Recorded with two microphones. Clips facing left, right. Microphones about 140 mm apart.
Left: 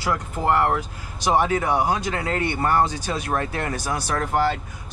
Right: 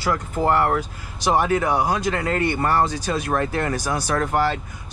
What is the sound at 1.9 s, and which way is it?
Speech, 5° left (ahead or behind).